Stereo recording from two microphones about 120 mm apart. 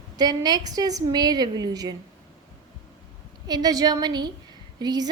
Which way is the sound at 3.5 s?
30° right (ahead or behind).